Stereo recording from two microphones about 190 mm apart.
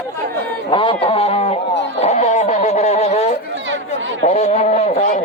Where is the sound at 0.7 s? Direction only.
25° left (ahead or behind).